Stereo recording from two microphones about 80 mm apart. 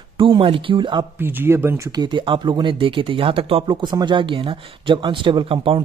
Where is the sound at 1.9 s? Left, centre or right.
Right.